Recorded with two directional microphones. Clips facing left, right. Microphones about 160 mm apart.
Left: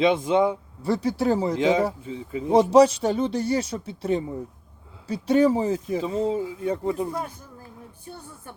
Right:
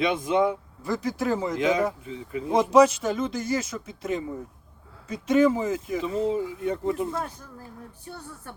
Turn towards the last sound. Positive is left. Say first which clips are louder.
# left 1 dB
turn(degrees=25)  # may be behind; listen again after turning